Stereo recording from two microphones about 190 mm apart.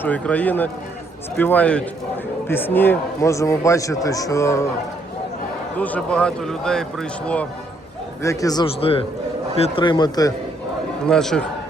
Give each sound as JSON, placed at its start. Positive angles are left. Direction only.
{"t": 0.0, "sound": "a man's voice", "side_deg": 5}
{"t": 5.7, "sound": "a man's voice", "side_deg": 10}
{"t": 8.2, "sound": "speech", "side_deg": 15}
{"t": 11.0, "sound": "a man's voice", "side_deg": 5}